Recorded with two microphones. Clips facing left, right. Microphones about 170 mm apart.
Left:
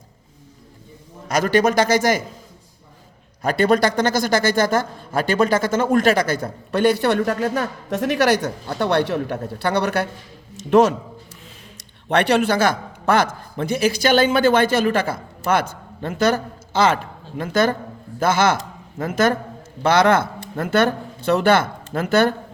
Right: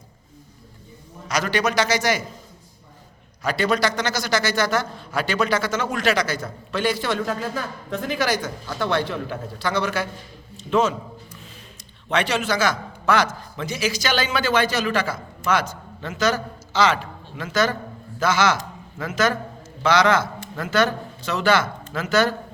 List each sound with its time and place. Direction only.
1.3 s a man's voice: 50° left (ahead or behind)
3.4 s a man's voice: 55° left (ahead or behind)